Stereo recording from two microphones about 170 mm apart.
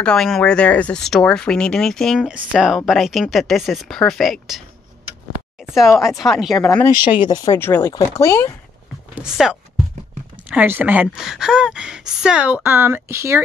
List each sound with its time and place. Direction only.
0.0 s speech: 5° left (ahead or behind)
6.8 s speech: 25° left (ahead or behind)
7.5 s speech: 15° left (ahead or behind)
9.1 s speech: 5° right (ahead or behind)